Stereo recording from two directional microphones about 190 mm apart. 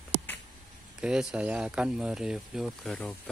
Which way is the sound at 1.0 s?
5° right (ahead or behind).